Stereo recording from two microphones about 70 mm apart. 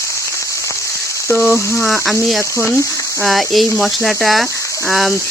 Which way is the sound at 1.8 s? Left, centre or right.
Centre.